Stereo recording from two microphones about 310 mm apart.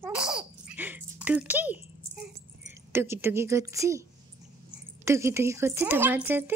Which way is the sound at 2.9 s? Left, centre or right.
Centre.